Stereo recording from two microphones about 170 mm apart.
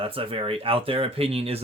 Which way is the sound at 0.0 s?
30° right (ahead or behind).